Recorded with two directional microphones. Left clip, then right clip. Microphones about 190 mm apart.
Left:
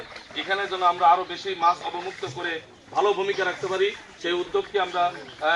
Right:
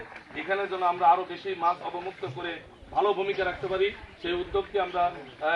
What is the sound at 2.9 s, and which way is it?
Speech, 35° right (ahead or behind).